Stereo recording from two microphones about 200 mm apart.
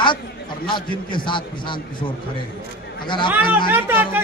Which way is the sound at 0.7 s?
25° left (ahead or behind).